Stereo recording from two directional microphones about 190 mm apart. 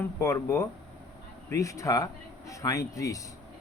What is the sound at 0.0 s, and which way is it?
Speech, 15° left (ahead or behind).